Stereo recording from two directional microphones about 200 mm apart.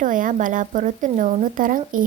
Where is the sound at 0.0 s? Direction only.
40° right (ahead or behind).